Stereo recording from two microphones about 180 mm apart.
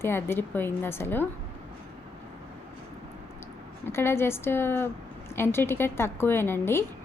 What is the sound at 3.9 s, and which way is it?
Speech, 15° left (ahead or behind).